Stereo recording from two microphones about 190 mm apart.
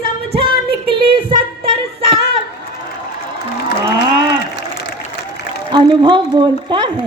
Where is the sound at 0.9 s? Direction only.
25° right (ahead or behind).